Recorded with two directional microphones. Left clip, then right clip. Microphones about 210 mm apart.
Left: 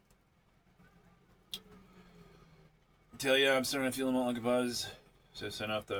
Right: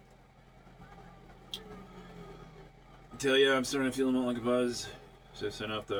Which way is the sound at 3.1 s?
25° left (ahead or behind).